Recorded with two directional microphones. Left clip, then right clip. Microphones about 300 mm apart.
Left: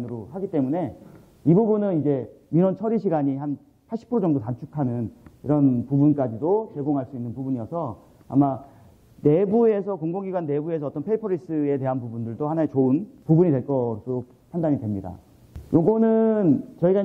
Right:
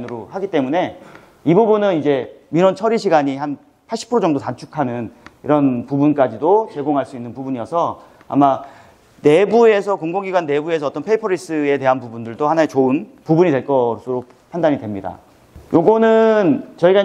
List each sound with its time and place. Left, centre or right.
0.2 s a man's voice: centre
6.4 s a man's voice: centre
6.7 s a man's voice: centre
13.7 s a man's voice: right; by 17.0 s centre